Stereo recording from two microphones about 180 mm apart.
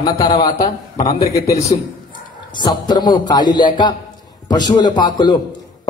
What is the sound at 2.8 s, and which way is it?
A man's voice, 25° left (ahead or behind).